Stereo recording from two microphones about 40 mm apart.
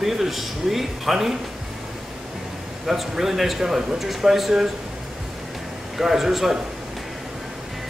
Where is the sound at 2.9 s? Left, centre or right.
Centre.